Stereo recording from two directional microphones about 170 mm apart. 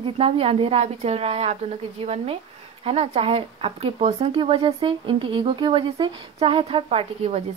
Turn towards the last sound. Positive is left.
turn(degrees=-35)  # may be behind; listen again after turning